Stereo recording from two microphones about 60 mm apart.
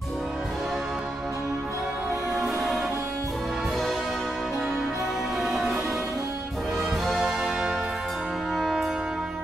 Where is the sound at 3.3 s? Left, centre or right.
Centre.